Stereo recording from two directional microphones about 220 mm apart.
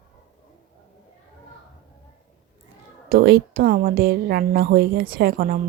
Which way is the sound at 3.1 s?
45° right (ahead or behind).